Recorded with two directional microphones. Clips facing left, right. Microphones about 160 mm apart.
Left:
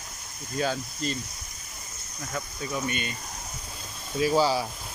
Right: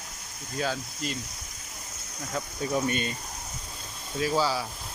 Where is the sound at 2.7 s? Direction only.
40° right (ahead or behind).